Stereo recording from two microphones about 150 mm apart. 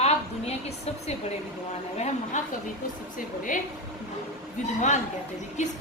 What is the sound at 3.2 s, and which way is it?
Speech, 60° left (ahead or behind).